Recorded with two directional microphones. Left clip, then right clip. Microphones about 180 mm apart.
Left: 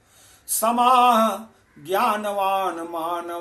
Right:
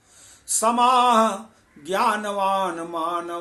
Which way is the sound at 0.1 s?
20° right (ahead or behind).